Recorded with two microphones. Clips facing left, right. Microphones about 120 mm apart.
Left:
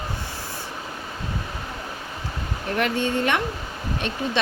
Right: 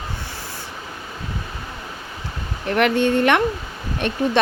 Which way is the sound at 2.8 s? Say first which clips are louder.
Right 6 dB; 70° right (ahead or behind).